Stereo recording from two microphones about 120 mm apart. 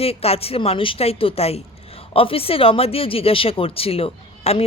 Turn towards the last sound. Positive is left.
turn(degrees=55)  # may be behind; listen again after turning